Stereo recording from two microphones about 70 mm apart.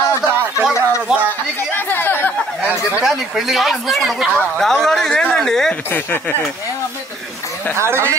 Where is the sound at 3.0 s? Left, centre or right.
Centre.